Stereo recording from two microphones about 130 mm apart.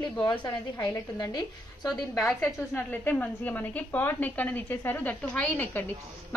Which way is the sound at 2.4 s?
10° left (ahead or behind).